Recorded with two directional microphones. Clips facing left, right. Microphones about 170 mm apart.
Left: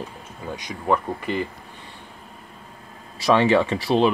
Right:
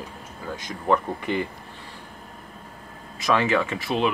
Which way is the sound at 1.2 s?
Centre (ahead or behind).